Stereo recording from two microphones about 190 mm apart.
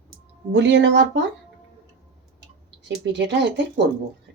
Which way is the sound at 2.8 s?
65° right (ahead or behind).